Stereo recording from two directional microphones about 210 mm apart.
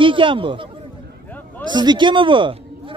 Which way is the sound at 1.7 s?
20° right (ahead or behind).